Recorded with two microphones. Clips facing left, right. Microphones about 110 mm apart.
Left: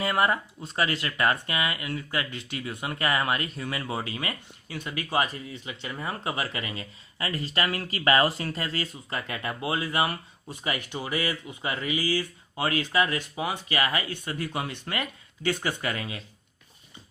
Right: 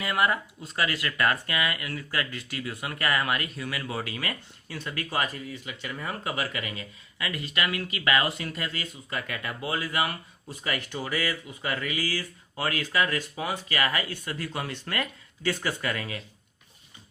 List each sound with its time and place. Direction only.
0.0 s speech: 30° left (ahead or behind)